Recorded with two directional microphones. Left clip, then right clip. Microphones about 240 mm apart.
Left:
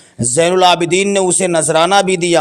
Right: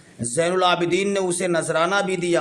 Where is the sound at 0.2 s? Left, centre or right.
Left.